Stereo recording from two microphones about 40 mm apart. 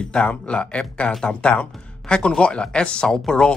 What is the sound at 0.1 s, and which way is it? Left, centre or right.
Speech, left.